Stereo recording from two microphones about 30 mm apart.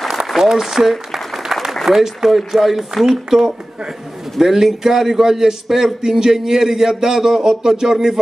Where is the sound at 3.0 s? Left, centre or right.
Centre.